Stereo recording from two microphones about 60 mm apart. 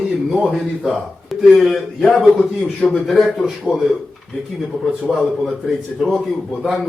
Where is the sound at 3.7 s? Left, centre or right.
Centre.